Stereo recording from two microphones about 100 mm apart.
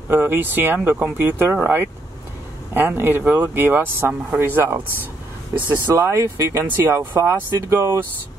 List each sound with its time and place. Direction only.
0.1 s speech: 20° right (ahead or behind)